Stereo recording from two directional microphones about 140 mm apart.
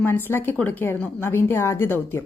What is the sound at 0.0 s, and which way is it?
A woman's voice, 15° left (ahead or behind).